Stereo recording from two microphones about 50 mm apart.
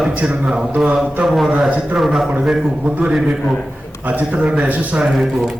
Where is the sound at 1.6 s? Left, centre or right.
Centre.